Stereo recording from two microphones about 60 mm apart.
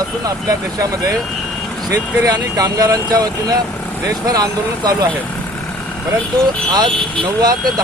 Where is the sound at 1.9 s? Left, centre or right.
Right.